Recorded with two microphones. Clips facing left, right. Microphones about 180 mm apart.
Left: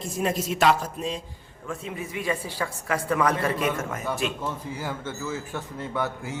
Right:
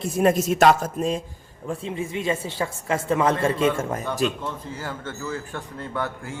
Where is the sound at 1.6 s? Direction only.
30° right (ahead or behind).